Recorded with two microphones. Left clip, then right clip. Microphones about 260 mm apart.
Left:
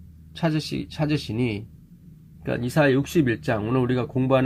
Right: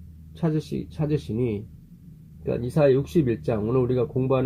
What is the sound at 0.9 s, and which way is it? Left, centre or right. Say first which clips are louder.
Speech: left 1 dB; left.